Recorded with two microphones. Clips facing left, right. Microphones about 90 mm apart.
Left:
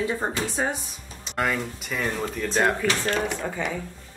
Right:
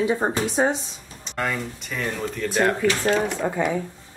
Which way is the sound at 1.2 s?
5° left (ahead or behind).